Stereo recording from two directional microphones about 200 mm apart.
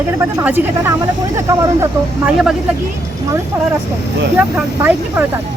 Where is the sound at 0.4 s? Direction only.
10° right (ahead or behind).